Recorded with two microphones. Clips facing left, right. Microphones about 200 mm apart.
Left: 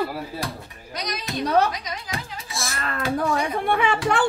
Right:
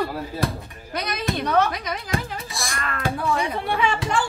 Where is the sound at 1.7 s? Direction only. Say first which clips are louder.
Right 4 dB; 55° right (ahead or behind).